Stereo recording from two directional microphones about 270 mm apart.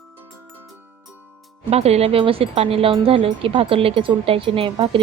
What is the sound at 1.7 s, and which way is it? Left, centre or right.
Speech, right.